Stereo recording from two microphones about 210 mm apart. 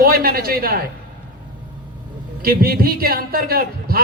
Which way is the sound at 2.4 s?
45° right (ahead or behind).